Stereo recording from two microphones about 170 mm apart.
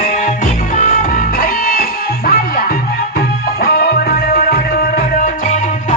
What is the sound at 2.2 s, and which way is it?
Music, 55° left (ahead or behind).